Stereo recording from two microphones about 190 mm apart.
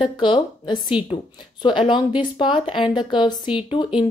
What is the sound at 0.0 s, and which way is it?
A woman's voice, 25° left (ahead or behind).